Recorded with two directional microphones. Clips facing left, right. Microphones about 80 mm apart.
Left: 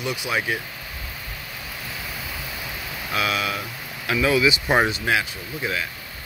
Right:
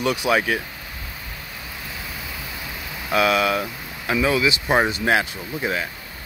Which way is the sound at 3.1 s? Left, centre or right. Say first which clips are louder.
Right 6 dB; right.